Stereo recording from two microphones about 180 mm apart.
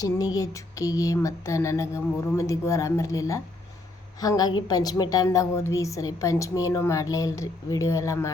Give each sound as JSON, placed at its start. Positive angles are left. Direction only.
{"t": 0.0, "sound": "a woman's voice", "side_deg": 20}